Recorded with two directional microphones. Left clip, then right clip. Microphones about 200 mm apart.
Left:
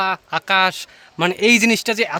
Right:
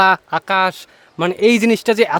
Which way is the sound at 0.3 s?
15° right (ahead or behind).